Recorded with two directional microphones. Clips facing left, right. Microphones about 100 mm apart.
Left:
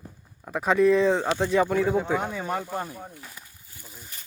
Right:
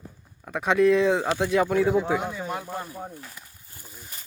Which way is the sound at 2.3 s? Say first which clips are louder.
Left 2 dB; 45° left (ahead or behind).